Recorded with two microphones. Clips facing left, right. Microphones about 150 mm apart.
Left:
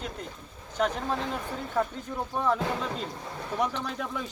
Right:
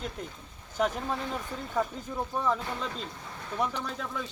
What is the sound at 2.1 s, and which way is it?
Speech, 5° right (ahead or behind).